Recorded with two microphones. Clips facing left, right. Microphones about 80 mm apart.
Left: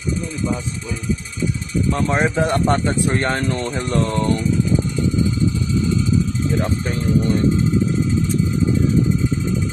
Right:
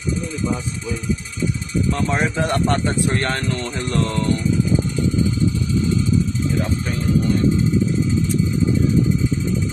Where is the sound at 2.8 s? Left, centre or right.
Centre.